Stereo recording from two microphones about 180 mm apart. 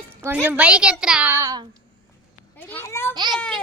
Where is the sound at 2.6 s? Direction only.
10° left (ahead or behind).